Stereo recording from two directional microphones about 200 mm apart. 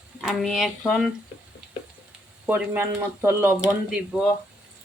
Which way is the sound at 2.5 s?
10° right (ahead or behind).